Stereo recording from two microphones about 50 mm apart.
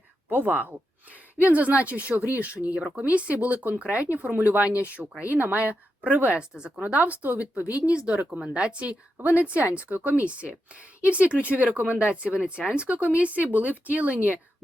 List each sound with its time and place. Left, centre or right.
0.3 s speech: right
6.5 s speech: centre
6.8 s speech: right